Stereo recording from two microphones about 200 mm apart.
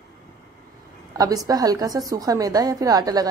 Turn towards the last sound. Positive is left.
turn(degrees=-20)  # may be behind; listen again after turning